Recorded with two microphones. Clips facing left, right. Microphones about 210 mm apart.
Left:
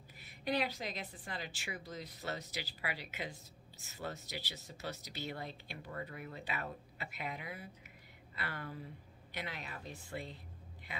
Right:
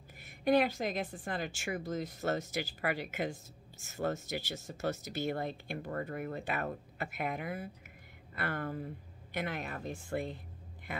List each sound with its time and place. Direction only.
0.2 s a woman's voice: 50° right (ahead or behind)